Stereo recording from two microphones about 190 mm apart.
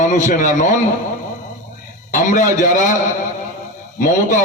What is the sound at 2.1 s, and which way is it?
Speech, 45° left (ahead or behind).